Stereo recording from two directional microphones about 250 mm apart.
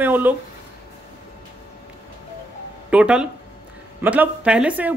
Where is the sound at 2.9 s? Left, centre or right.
Centre.